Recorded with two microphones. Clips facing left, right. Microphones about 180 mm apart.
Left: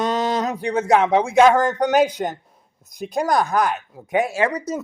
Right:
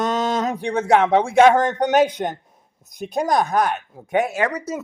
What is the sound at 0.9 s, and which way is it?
Speech, 30° right (ahead or behind).